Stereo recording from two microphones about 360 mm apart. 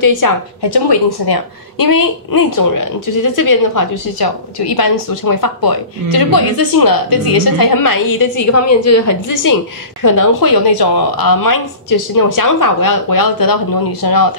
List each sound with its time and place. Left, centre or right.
0.0 s a woman's voice: left